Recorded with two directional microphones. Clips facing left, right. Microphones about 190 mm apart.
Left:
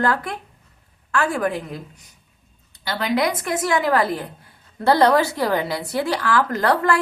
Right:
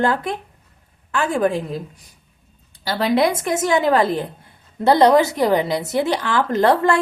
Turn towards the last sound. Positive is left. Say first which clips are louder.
# right 3 dB
turn(degrees=-25)  # may be behind; listen again after turning